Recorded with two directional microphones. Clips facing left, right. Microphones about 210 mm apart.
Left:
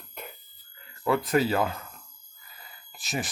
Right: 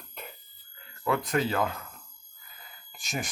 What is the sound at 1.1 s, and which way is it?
Speech, 5° left (ahead or behind).